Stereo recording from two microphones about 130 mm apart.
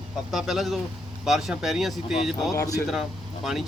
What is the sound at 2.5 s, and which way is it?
Speech, 25° left (ahead or behind).